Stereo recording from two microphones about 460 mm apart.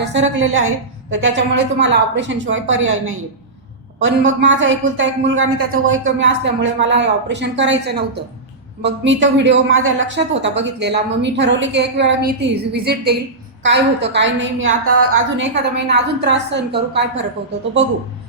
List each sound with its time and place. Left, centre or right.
0.0 s speech: right